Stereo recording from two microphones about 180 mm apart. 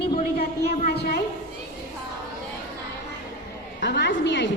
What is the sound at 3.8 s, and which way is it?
Speech, 70° left (ahead or behind).